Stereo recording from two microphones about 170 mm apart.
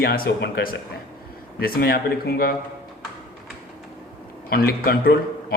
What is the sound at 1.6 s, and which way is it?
Speech, 60° left (ahead or behind).